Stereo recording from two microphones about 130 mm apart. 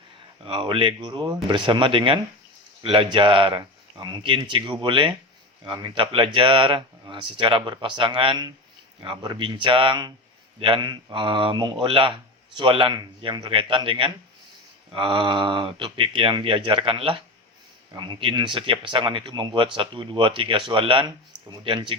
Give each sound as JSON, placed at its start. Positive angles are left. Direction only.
{"t": 0.4, "sound": "speech", "side_deg": -40}